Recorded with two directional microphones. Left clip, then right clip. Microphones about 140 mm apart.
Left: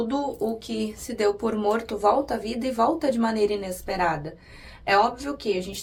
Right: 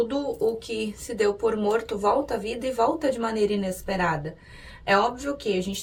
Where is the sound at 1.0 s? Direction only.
35° left (ahead or behind).